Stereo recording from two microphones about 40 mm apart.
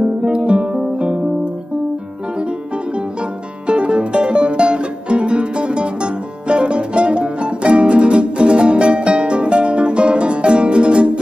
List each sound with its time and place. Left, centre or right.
0.0 s guitar: right
3.6 s music: right